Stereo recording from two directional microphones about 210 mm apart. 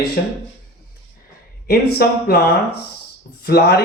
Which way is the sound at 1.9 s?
45° left (ahead or behind).